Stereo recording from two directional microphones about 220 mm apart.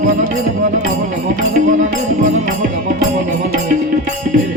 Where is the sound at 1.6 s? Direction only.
35° right (ahead or behind).